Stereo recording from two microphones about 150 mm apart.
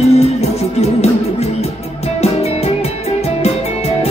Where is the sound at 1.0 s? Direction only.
45° left (ahead or behind).